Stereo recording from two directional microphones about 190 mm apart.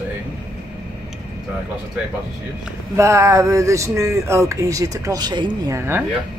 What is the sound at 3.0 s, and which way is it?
Speech, 15° right (ahead or behind).